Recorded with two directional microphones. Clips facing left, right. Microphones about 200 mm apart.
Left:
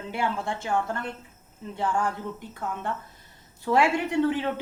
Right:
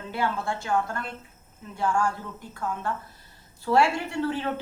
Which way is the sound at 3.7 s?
20° left (ahead or behind).